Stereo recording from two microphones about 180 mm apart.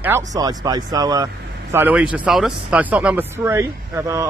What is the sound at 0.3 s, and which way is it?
Speech, 20° right (ahead or behind).